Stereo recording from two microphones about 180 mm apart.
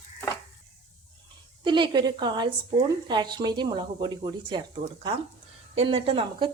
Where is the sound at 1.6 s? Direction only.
25° right (ahead or behind).